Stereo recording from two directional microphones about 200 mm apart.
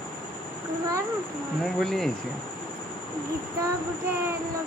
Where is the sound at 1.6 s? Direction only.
Centre (ahead or behind).